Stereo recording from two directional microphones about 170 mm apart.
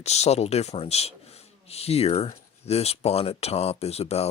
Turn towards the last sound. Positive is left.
turn(degrees=35)  # may be behind; listen again after turning